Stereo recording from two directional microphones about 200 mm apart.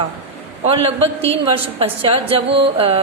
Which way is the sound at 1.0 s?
30° right (ahead or behind).